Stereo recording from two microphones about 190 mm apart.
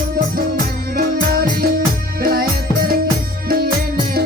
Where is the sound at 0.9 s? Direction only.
50° right (ahead or behind).